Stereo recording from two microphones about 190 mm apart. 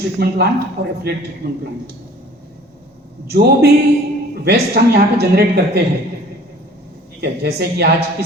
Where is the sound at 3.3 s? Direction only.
55° right (ahead or behind).